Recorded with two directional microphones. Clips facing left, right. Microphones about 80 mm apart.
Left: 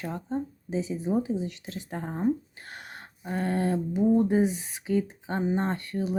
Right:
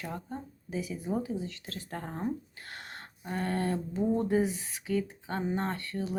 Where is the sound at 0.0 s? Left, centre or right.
Left.